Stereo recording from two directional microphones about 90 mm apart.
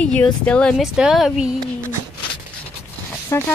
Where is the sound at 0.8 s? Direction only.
5° right (ahead or behind).